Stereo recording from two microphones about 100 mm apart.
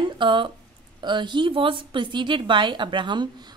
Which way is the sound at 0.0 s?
55° right (ahead or behind).